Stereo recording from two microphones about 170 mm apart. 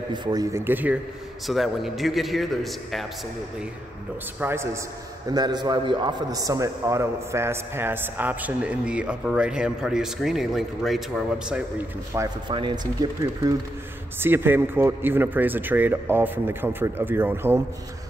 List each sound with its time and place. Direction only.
0.1 s a man's voice: 25° right (ahead or behind)
1.5 s a man's voice: centre (ahead or behind)
4.4 s a man's voice: 15° right (ahead or behind)
5.3 s a man's voice: 25° right (ahead or behind); by 11.9 s 5° right (ahead or behind)
12.1 s a man's voice: 20° right (ahead or behind)
14.2 s a man's voice: 10° right (ahead or behind)